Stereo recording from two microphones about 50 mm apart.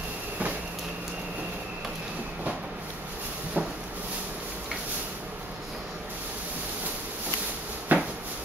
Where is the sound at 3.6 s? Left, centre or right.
Right.